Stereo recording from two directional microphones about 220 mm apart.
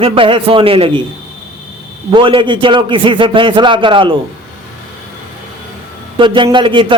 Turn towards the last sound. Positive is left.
turn(degrees=-20)  # may be behind; listen again after turning